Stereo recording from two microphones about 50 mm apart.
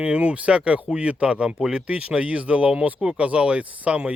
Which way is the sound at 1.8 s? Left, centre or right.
Right.